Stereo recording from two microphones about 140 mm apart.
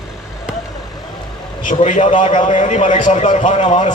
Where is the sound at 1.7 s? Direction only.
55° left (ahead or behind).